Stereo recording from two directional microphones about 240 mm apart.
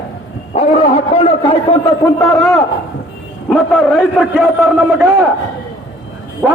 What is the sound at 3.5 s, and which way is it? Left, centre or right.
A man's voice, centre.